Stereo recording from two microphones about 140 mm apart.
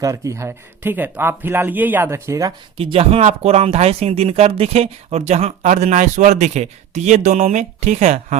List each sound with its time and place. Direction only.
0.0 s speech: 20° right (ahead or behind)
2.7 s speech: 40° right (ahead or behind)